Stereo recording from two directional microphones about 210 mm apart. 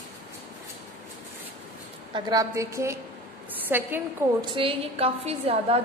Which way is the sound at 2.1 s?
20° right (ahead or behind).